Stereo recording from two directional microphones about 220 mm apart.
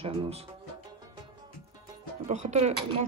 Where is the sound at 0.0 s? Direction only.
30° right (ahead or behind).